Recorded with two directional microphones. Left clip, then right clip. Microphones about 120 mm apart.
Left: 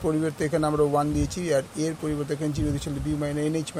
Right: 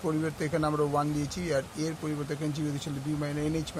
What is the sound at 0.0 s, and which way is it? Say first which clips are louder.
Speech: left 5 dB; 35° left (ahead or behind).